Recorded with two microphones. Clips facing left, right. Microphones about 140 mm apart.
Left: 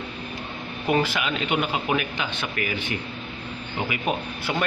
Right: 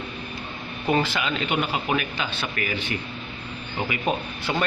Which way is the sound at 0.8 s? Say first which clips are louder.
Even; 15° left (ahead or behind).